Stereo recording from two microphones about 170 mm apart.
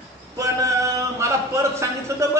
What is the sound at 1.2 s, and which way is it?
A woman's voice, 15° right (ahead or behind).